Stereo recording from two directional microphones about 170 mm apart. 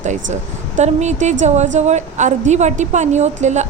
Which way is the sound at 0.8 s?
45° right (ahead or behind).